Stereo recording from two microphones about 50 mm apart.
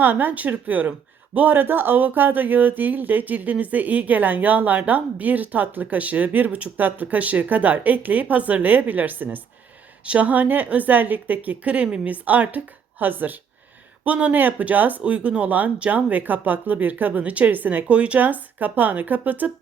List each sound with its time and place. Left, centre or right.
0.0 s speech: right